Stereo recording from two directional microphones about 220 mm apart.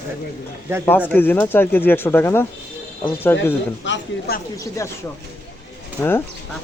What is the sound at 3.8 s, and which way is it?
Speech, 50° left (ahead or behind).